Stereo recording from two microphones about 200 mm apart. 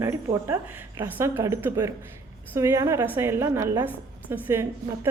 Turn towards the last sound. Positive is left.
turn(degrees=-10)  # may be behind; listen again after turning